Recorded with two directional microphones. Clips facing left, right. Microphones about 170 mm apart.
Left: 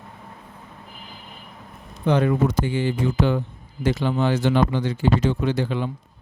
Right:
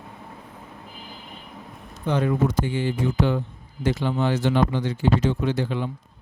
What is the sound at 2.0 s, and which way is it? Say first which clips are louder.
Speech: left 3 dB; 75° left (ahead or behind).